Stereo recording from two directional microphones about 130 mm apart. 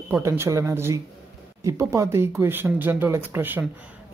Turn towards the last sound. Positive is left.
turn(degrees=-15)  # may be behind; listen again after turning